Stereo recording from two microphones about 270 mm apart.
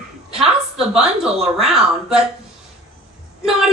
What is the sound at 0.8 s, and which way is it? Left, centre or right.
Speech, centre.